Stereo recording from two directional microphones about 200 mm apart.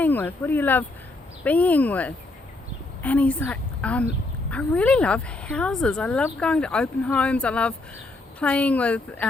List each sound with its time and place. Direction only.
0.0 s a woman's voice: 10° left (ahead or behind)